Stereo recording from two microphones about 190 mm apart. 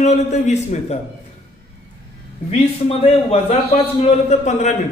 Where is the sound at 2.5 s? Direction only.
30° left (ahead or behind).